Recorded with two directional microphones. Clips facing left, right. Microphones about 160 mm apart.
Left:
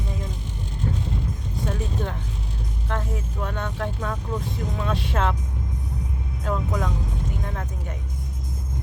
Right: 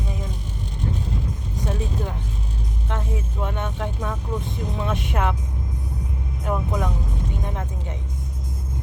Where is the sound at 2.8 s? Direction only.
20° right (ahead or behind).